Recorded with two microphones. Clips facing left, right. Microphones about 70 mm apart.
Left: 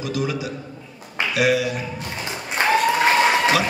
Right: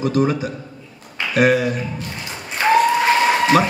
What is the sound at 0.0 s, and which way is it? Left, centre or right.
A man's voice, right.